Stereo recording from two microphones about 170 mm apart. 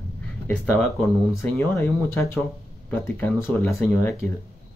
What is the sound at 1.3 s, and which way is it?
Speech, 15° left (ahead or behind).